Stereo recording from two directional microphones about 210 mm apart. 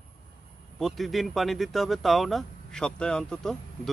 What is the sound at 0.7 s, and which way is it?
Speech, centre (ahead or behind).